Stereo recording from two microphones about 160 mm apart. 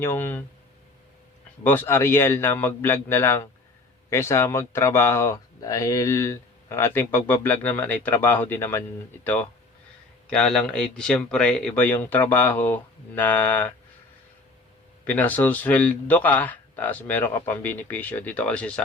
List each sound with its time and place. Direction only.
0.0 s speech: 15° left (ahead or behind)
1.6 s speech: 15° left (ahead or behind)
15.0 s speech: 10° left (ahead or behind)